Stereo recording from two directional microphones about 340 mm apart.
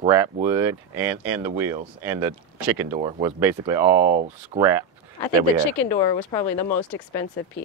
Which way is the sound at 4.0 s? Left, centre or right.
Right.